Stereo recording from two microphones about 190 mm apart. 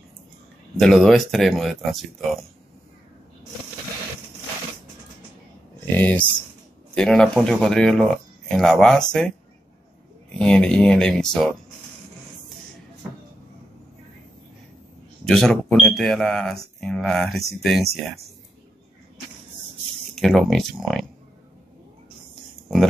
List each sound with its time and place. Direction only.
0.7 s speech: centre (ahead or behind)
5.9 s speech: 10° left (ahead or behind)
10.4 s speech: 5° left (ahead or behind)
15.2 s speech: 5° left (ahead or behind)
20.2 s speech: centre (ahead or behind)